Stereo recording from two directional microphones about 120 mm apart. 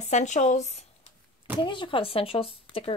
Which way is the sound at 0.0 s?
85° left.